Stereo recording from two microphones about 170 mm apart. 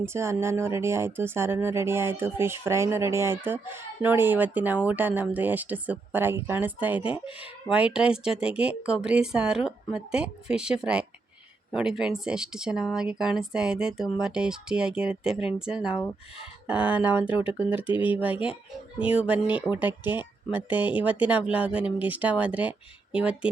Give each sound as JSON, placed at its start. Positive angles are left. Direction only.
{"t": 0.0, "sound": "speech", "side_deg": -15}
{"t": 17.8, "sound": "speech", "side_deg": 30}
{"t": 18.9, "sound": "speech", "side_deg": -5}